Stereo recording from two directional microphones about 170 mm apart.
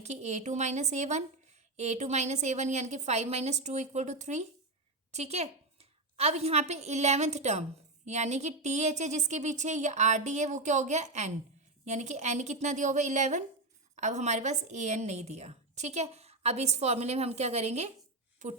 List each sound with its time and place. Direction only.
0.0 s a woman's voice: 40° right (ahead or behind)